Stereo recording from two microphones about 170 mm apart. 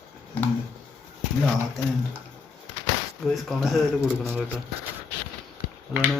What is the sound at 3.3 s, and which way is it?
Speech, centre (ahead or behind).